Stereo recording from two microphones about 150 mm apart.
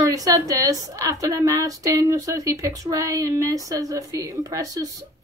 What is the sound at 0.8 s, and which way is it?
A woman's voice, 20° right (ahead or behind).